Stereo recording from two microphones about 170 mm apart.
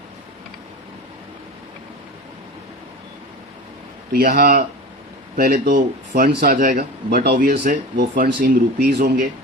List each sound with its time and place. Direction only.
4.1 s speech: 65° right (ahead or behind)